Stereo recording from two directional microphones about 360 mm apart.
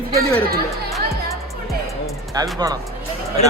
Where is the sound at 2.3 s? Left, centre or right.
Centre.